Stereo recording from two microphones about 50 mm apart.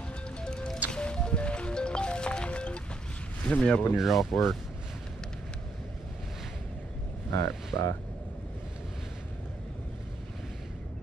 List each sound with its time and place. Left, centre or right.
0.4 s music: centre
3.4 s speech: left
3.9 s speech: centre
7.3 s speech: left